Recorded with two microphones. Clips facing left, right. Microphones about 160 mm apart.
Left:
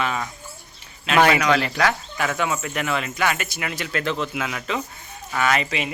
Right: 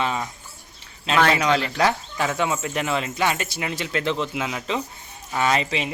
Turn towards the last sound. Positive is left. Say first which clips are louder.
# even
turn(degrees=-25)  # may be behind; listen again after turning